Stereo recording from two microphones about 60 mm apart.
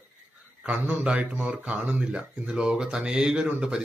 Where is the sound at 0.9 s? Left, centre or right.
Right.